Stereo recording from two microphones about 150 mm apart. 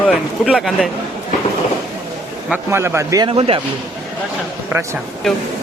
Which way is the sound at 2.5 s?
15° right (ahead or behind).